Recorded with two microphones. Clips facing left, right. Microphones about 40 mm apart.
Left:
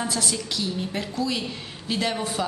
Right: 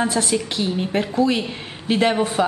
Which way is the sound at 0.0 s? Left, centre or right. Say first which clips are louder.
Right 7 dB; right.